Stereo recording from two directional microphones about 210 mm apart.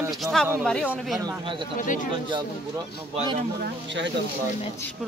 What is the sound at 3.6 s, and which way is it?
Speech, 60° right (ahead or behind).